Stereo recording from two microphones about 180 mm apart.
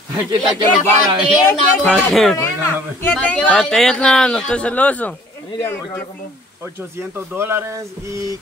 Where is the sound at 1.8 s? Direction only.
5° left (ahead or behind).